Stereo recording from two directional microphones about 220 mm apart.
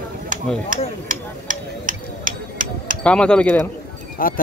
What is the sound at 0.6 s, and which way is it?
Tick-tock, 40° right (ahead or behind).